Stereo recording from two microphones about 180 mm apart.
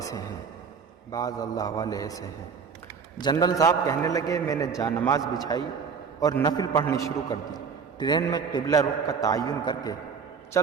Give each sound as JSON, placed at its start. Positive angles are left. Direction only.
{"t": 0.0, "sound": "music", "side_deg": 20}
{"t": 1.1, "sound": "a man's voice", "side_deg": 20}